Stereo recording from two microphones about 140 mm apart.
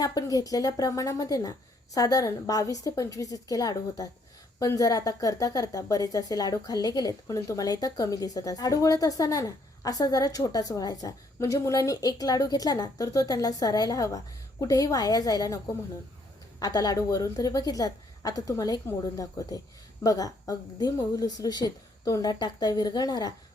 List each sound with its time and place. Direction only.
0.0 s a woman's voice: 25° left (ahead or behind)
16.6 s a woman's voice: 25° left (ahead or behind)